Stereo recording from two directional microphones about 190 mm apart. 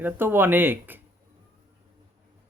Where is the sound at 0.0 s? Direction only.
10° right (ahead or behind).